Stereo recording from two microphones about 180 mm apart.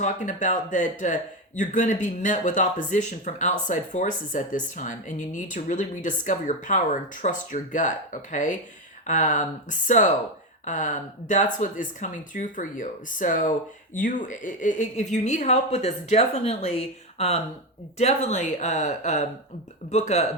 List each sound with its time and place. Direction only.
0.0 s speech: 45° left (ahead or behind)